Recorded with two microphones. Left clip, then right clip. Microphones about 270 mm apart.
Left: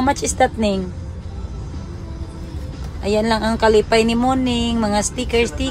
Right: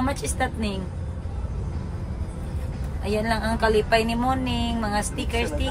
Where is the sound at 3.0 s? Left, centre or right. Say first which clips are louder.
Left 7 dB; centre.